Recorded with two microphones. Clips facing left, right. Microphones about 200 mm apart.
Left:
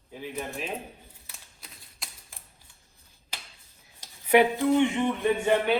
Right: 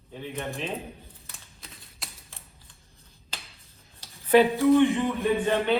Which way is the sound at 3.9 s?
15° left (ahead or behind).